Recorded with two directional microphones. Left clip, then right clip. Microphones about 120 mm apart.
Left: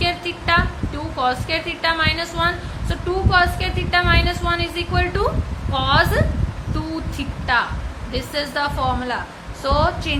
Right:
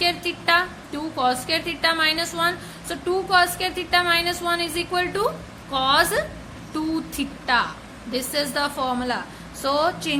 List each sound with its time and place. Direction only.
0.0 s a woman's voice: 40° right (ahead or behind)